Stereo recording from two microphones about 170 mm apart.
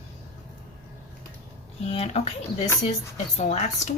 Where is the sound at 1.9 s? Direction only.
40° left (ahead or behind).